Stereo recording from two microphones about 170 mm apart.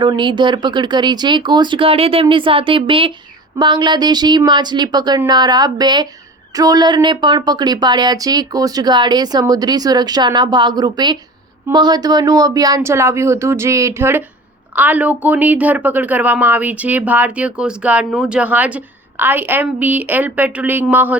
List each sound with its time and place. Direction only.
0.0 s a woman's voice: 25° right (ahead or behind); by 21.2 s 10° right (ahead or behind)